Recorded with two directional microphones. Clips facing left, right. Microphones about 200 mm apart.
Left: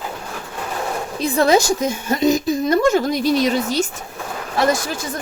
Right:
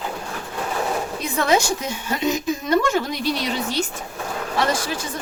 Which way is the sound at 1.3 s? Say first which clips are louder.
Left 5 dB; 35° left (ahead or behind).